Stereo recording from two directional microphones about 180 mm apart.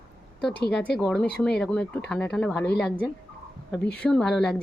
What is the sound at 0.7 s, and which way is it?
A woman's voice, 5° left (ahead or behind).